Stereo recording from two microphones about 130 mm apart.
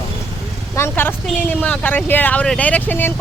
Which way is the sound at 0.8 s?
15° left (ahead or behind).